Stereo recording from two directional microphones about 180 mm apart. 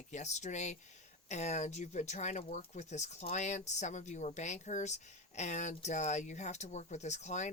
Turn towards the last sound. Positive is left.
turn(degrees=40)  # may be behind; listen again after turning